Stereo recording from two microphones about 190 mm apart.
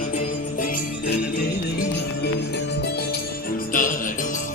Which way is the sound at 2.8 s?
60° left (ahead or behind).